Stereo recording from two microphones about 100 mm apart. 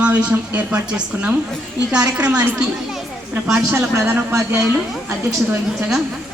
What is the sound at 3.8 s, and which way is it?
Speech, 30° right (ahead or behind).